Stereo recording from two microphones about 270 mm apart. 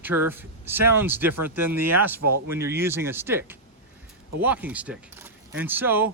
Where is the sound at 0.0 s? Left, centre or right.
Centre.